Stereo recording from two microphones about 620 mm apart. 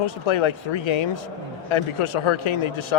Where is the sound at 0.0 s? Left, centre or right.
Left.